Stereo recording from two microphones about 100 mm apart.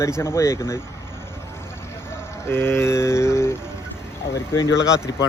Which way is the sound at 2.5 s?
25° left (ahead or behind).